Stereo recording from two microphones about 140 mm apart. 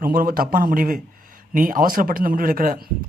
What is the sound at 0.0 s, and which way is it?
Speech, 90° right.